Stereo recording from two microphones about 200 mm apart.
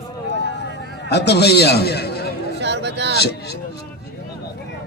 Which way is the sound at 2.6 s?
60° right (ahead or behind).